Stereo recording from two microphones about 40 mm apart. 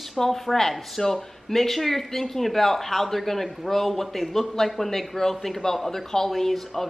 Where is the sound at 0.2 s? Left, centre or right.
Centre.